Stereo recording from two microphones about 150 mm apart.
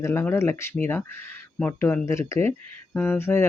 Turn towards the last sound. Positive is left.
turn(degrees=15)  # may be behind; listen again after turning